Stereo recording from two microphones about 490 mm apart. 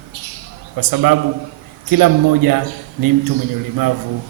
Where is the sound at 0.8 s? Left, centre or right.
Right.